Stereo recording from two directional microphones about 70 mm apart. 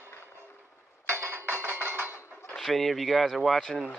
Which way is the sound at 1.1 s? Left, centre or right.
Right.